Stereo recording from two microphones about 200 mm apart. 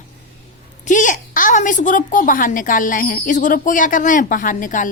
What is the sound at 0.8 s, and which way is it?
A woman's voice, 40° left (ahead or behind).